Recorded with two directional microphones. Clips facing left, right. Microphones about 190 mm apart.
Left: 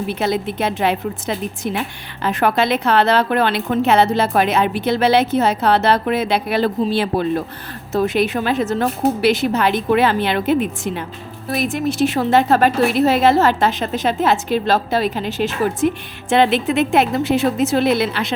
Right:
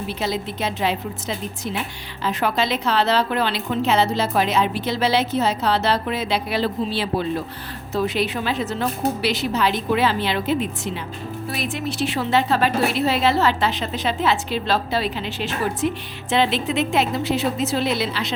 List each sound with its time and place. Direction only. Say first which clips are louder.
0.1 s a woman's voice: left 5 dB; 55° left (ahead or behind)